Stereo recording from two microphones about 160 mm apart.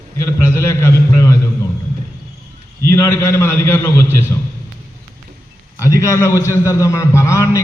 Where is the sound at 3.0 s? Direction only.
15° left (ahead or behind).